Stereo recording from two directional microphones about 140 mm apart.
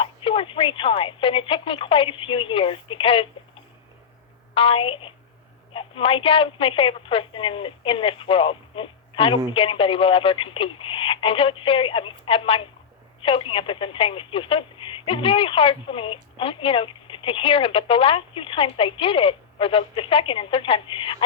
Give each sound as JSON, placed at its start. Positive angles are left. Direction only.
{"t": 0.0, "sound": "speech", "side_deg": 40}
{"t": 4.5, "sound": "speech", "side_deg": 40}